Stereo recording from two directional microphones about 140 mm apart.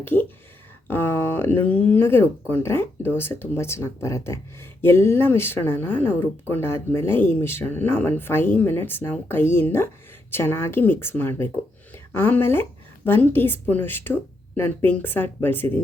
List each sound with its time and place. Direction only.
0.0 s speech: 15° left (ahead or behind)